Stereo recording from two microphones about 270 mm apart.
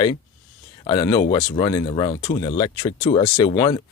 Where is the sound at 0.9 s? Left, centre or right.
Centre.